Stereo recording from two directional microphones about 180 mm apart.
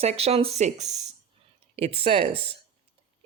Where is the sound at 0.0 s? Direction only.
35° right (ahead or behind).